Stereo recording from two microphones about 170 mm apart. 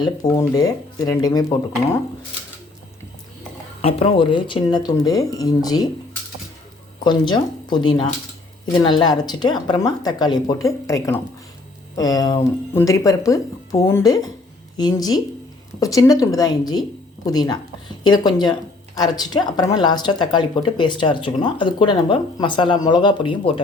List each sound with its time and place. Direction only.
0.0 s speech: 20° left (ahead or behind)
3.8 s speech: 35° left (ahead or behind)
7.0 s speech: 25° left (ahead or behind)